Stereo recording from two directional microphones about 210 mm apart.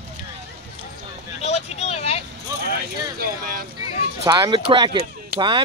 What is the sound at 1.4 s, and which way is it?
Vehicle, 30° left (ahead or behind).